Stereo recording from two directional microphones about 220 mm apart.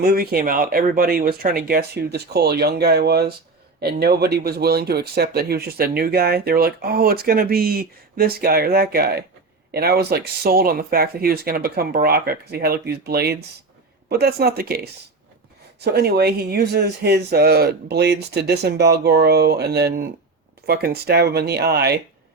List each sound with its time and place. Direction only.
0.0 s speech: 45° right (ahead or behind)
15.8 s speech: 45° right (ahead or behind)